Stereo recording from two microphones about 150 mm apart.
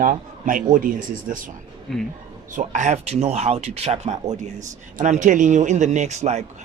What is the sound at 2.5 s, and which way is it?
Speech, 55° right (ahead or behind).